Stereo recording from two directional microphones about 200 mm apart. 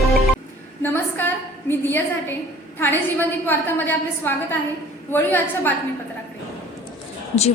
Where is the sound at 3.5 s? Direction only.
10° left (ahead or behind).